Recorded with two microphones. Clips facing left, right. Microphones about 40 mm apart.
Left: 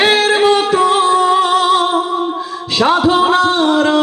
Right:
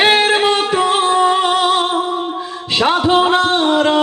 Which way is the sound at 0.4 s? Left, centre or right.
Right.